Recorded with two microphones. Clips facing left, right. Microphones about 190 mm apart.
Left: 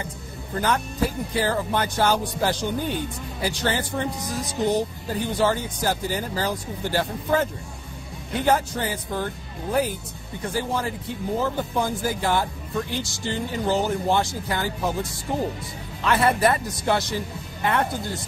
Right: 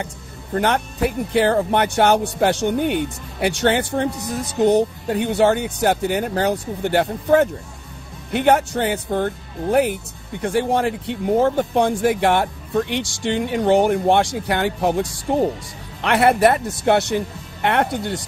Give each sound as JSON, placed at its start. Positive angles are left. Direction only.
{"t": 0.6, "sound": "speech", "side_deg": -70}